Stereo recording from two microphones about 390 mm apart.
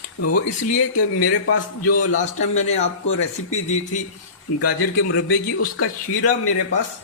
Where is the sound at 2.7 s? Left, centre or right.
Centre.